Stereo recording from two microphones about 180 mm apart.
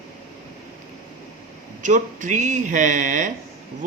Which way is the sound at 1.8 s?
45° right (ahead or behind).